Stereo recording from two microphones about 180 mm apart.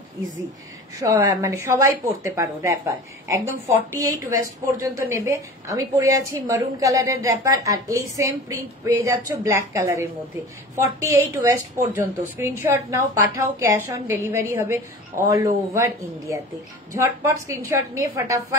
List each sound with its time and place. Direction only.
0.9 s a woman's voice: 15° right (ahead or behind)
3.9 s a woman's voice: 15° right (ahead or behind)